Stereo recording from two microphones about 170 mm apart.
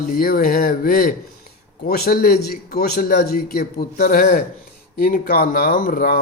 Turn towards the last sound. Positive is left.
turn(degrees=60)  # may be behind; listen again after turning